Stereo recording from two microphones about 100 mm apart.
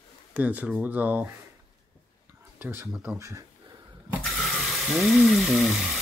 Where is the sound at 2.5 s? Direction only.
20° right (ahead or behind).